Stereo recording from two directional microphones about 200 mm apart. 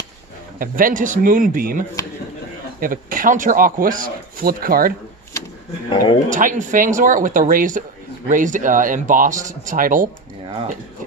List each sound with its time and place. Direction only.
0.6 s speech: 45° right (ahead or behind)
5.9 s speech: 25° left (ahead or behind)
6.3 s speech: 40° right (ahead or behind)